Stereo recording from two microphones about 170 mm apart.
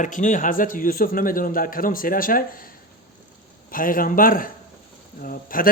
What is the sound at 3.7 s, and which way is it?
A man's voice, 55° left (ahead or behind).